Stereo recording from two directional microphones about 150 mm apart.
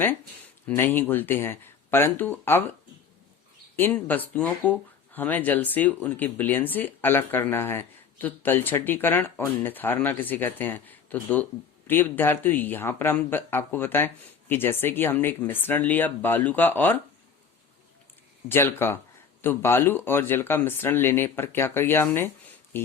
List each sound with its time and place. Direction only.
0.8 s speech: 15° left (ahead or behind)
3.8 s speech: 10° left (ahead or behind)
18.4 s speech: 15° left (ahead or behind)